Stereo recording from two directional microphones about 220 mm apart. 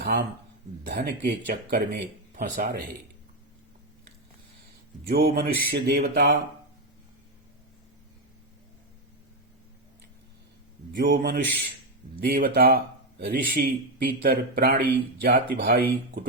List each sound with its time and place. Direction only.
0.0 s speech: 50° right (ahead or behind)
2.3 s speech: 35° right (ahead or behind)
5.0 s speech: 45° right (ahead or behind)
10.9 s speech: 40° right (ahead or behind)